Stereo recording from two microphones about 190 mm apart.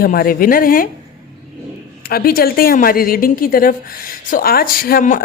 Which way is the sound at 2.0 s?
50° left (ahead or behind).